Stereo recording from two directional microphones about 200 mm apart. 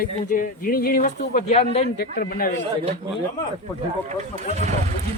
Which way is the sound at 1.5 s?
30° left (ahead or behind).